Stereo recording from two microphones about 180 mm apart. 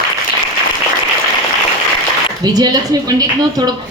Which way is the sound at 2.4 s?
20° right (ahead or behind).